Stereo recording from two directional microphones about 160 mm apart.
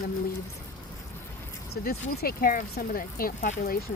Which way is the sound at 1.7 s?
75° left (ahead or behind).